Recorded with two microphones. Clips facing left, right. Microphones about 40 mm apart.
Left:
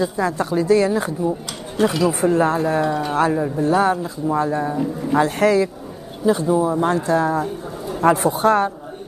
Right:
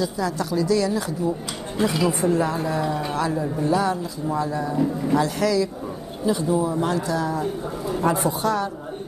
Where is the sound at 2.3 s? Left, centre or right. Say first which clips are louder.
Left 5 dB; left.